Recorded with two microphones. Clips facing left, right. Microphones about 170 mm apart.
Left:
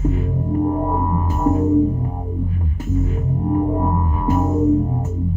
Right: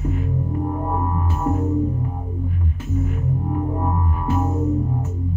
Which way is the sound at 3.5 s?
35° left (ahead or behind).